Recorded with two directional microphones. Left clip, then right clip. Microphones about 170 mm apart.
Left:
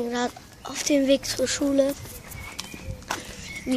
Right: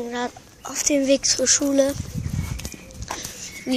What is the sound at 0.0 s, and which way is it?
Speech, 10° left (ahead or behind).